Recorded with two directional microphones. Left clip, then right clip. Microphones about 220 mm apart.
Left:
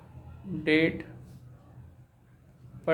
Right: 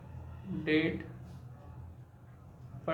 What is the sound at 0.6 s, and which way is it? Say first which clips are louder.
Speech: left 6 dB; 50° left (ahead or behind).